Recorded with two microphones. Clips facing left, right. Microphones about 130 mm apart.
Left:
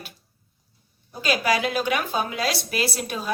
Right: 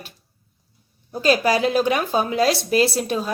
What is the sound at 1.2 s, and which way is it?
A woman's voice, 35° right (ahead or behind).